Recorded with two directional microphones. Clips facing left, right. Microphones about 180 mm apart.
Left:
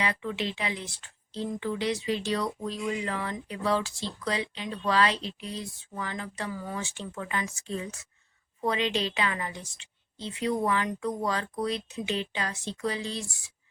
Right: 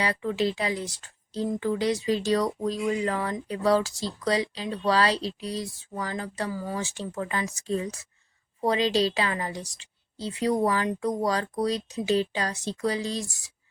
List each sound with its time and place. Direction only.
0.0 s speech: 35° right (ahead or behind)